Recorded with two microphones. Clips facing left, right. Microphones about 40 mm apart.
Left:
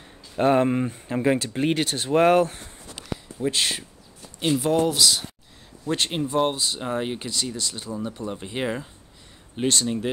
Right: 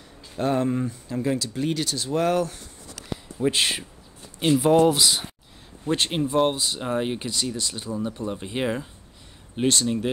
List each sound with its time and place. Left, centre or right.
0.4 s speech: left
3.3 s speech: centre
5.9 s a man's voice: right
6.3 s speech: centre
7.5 s speech: centre
8.3 s speech: centre